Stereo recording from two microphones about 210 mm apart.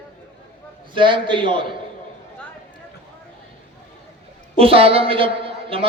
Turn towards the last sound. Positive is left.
turn(degrees=-25)  # may be behind; listen again after turning